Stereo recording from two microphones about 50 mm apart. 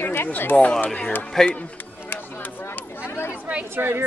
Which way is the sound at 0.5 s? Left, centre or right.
Left.